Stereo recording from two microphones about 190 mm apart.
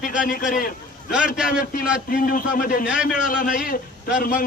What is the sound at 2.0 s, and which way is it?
Speech, 50° left (ahead or behind).